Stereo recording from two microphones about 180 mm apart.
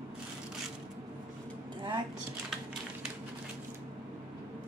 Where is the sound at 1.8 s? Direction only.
25° right (ahead or behind).